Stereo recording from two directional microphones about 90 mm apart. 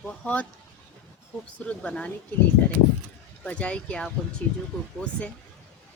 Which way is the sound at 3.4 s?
15° left (ahead or behind).